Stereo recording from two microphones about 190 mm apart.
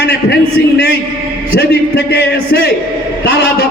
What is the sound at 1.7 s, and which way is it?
Speech, 55° left (ahead or behind).